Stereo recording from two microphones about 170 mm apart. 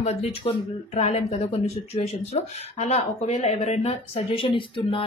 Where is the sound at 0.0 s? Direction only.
40° left (ahead or behind).